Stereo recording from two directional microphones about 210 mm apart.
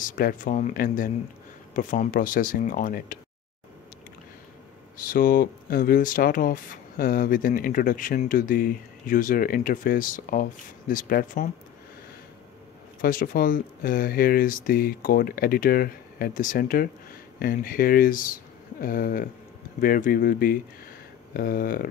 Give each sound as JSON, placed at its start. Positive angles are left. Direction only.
{"t": 0.1, "sound": "speech", "side_deg": 40}
{"t": 5.1, "sound": "speech", "side_deg": 40}
{"t": 13.0, "sound": "speech", "side_deg": 45}